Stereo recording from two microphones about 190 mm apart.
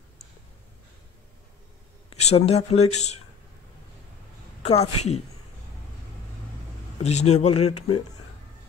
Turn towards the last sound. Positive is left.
turn(degrees=35)  # may be behind; listen again after turning